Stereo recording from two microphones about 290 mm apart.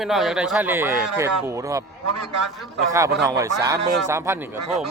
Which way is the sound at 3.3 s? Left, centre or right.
Centre.